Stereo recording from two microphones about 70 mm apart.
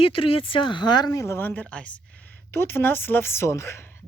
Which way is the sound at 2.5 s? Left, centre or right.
Left.